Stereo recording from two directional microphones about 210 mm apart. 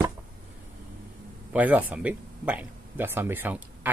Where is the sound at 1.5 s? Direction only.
5° right (ahead or behind).